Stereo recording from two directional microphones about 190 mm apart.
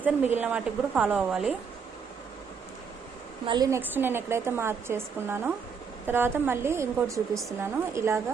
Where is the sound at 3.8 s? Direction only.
10° right (ahead or behind).